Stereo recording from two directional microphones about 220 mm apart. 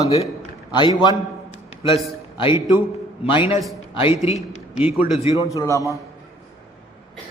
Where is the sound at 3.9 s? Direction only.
25° left (ahead or behind).